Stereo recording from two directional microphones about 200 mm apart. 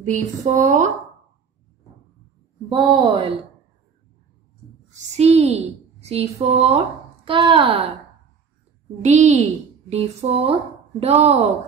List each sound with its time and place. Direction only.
0.0 s a woman's voice: 40° right (ahead or behind)
2.7 s a woman's voice: 25° right (ahead or behind)
4.9 s a woman's voice: 35° right (ahead or behind)
9.0 s a woman's voice: 35° right (ahead or behind)